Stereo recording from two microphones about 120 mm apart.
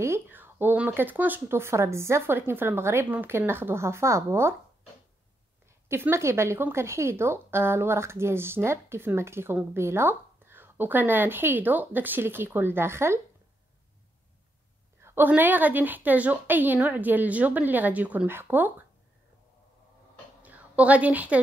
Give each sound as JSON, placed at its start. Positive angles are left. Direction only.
{"t": 0.0, "sound": "a woman's voice", "side_deg": -20}
{"t": 5.9, "sound": "a woman's voice", "side_deg": -20}
{"t": 15.0, "sound": "a woman's voice", "side_deg": -20}
{"t": 20.4, "sound": "a woman's voice", "side_deg": -10}